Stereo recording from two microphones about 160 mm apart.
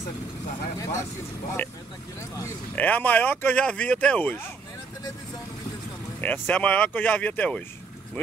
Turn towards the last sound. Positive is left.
turn(degrees=10)  # may be behind; listen again after turning